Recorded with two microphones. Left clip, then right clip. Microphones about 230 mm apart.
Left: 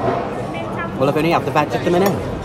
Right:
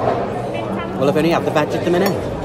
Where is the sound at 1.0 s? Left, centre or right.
Centre.